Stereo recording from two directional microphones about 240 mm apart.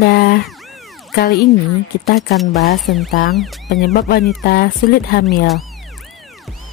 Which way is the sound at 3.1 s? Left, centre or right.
Left.